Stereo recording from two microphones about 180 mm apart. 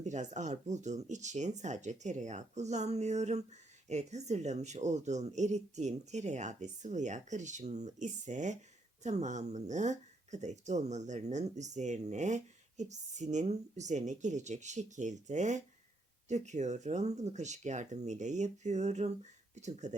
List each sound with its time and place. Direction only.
0.0 s speech: 40° right (ahead or behind)